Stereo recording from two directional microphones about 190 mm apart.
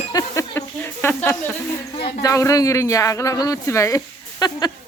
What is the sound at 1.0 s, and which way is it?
Speech, 10° left (ahead or behind).